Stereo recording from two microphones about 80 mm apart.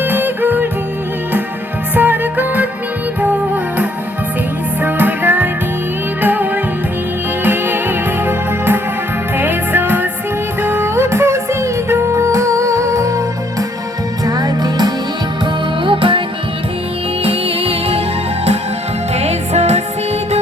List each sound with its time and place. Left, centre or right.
0.0 s music: right
2.0 s music: right
14.3 s music: right
15.8 s music: right